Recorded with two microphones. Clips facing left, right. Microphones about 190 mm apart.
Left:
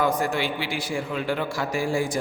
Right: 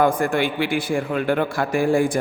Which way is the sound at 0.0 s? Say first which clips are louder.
Right 5 dB; 55° right (ahead or behind).